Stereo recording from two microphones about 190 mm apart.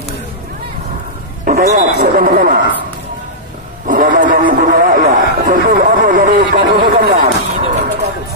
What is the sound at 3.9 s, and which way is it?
Speech, 45° right (ahead or behind).